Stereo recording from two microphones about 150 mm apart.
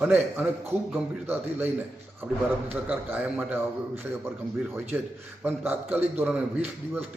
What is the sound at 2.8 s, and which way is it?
Speech, 10° right (ahead or behind).